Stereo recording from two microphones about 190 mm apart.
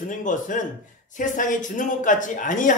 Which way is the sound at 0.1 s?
40° left (ahead or behind).